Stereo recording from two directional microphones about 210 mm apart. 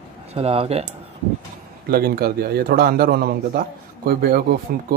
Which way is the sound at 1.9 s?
45° right (ahead or behind).